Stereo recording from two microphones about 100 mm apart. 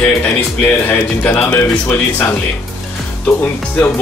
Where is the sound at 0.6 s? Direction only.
20° left (ahead or behind).